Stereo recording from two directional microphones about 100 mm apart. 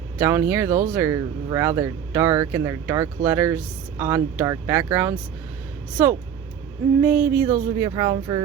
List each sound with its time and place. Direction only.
0.2 s speech: 25° right (ahead or behind)
7.0 s a sound: 15° right (ahead or behind)
7.4 s speech: 35° right (ahead or behind)